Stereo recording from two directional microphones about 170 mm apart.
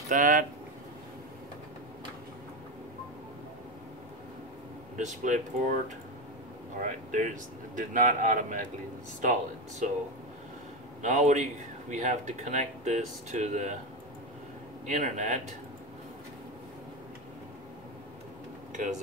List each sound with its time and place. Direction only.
0.1 s speech: 50° right (ahead or behind)
4.9 s speech: 45° right (ahead or behind)
6.8 s speech: 50° right (ahead or behind)
11.0 s speech: 45° right (ahead or behind)
14.9 s speech: 45° right (ahead or behind)
18.7 s a sound: 45° right (ahead or behind)